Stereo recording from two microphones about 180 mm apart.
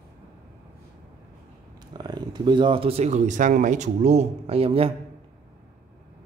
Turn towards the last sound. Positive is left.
turn(degrees=-30)  # may be behind; listen again after turning